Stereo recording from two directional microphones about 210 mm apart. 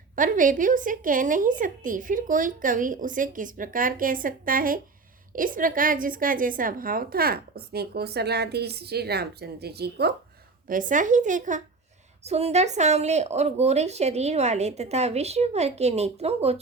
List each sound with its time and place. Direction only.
0.2 s a woman's voice: 40° right (ahead or behind)
10.7 s a woman's voice: 40° right (ahead or behind)